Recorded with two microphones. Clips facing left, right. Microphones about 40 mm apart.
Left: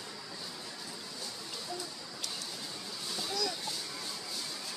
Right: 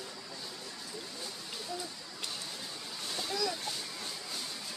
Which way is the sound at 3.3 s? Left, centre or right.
Centre.